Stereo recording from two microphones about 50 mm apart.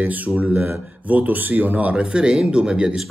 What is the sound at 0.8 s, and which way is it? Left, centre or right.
Speech, right.